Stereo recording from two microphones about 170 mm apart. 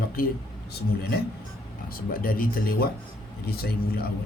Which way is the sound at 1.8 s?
60° left (ahead or behind).